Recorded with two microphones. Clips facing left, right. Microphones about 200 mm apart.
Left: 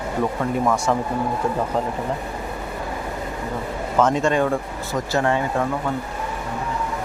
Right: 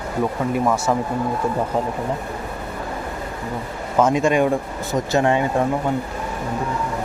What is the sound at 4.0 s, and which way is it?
Speech, 10° right (ahead or behind).